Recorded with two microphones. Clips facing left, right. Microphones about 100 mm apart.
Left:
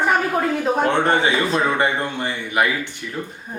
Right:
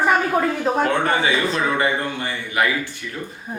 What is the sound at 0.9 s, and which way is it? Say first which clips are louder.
Speech: left 2 dB; 25° left (ahead or behind).